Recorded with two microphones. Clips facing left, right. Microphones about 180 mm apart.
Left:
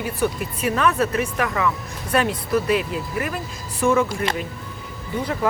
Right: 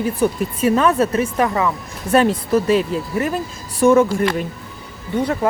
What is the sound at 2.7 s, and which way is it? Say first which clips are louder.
Speech: right 5 dB; 30° right (ahead or behind).